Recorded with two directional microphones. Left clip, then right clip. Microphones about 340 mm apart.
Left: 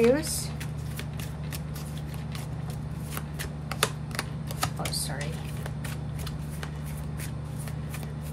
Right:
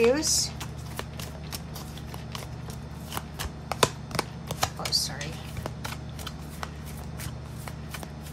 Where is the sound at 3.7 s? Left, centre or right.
Centre.